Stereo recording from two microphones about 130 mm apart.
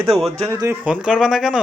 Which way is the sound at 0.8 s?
10° right (ahead or behind).